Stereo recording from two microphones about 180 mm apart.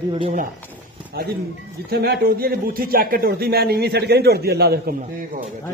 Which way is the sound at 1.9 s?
60° right (ahead or behind).